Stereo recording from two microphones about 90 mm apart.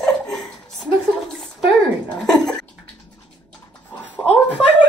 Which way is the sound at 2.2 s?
5° left (ahead or behind).